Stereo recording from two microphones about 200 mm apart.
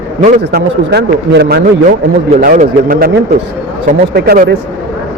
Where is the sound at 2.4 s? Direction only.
45° right (ahead or behind).